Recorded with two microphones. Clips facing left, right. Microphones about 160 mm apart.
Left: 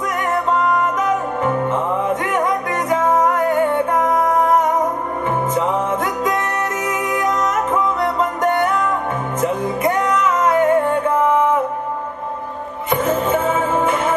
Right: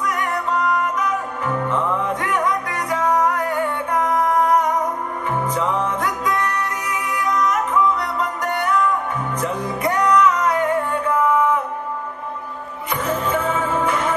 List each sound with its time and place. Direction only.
0.0 s music: 25° left (ahead or behind)
6.6 s music: 50° left (ahead or behind)
8.0 s music: 25° left (ahead or behind)
12.9 s music: 25° left (ahead or behind)